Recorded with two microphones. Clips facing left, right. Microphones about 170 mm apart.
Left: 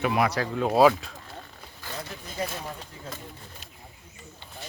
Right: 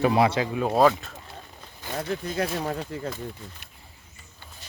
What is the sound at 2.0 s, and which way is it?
Speech, 65° right (ahead or behind).